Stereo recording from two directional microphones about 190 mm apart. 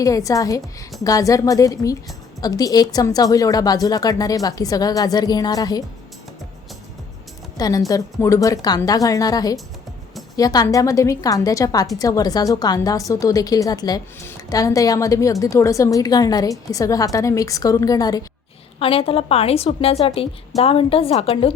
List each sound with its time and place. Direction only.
0.0 s a woman's voice: 15° left (ahead or behind)
7.5 s a woman's voice: 20° left (ahead or behind)